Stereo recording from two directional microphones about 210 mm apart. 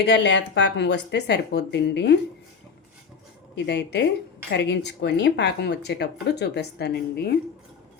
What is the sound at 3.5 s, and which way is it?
A woman's voice, 55° left (ahead or behind).